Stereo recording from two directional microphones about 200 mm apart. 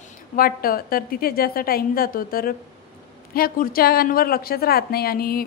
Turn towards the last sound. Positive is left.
turn(degrees=50)  # may be behind; listen again after turning